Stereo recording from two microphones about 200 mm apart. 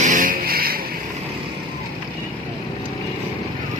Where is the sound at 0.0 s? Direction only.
40° right (ahead or behind).